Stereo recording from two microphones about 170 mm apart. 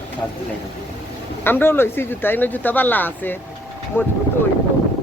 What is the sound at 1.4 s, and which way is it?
Speech, 10° left (ahead or behind).